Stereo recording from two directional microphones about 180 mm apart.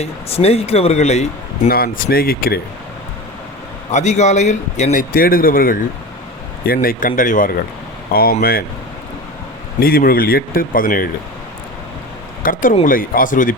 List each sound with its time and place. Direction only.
0.0 s a man's voice: 35° left (ahead or behind)
1.7 s speech: 55° left (ahead or behind)
3.9 s a man's voice: 40° left (ahead or behind); by 8.6 s 55° left (ahead or behind)
9.8 s speech: 55° left (ahead or behind)
12.4 s speech: 50° left (ahead or behind)